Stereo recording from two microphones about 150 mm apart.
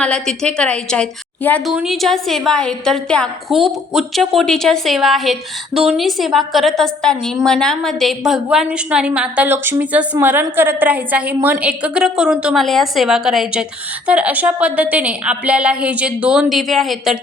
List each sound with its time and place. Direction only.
0.0 s a woman's voice: 5° left (ahead or behind)